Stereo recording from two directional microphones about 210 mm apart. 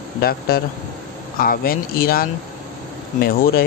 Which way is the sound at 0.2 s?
45° left (ahead or behind).